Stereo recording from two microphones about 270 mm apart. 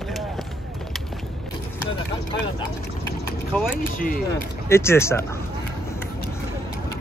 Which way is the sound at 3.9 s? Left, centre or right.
Left.